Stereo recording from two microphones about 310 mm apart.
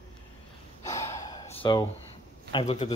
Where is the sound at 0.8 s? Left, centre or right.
Centre.